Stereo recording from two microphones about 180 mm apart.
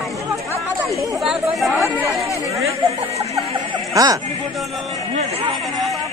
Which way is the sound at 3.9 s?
20° right (ahead or behind).